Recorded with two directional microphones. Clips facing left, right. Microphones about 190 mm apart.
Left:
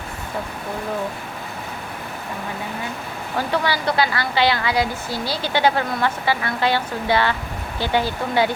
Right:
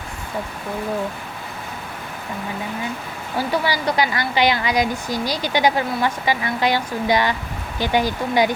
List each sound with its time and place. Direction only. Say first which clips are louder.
3.3 s a woman's voice: right 1 dB; 10° right (ahead or behind)